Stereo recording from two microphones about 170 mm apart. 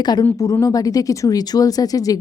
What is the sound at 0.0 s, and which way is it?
A woman's voice, 25° left (ahead or behind).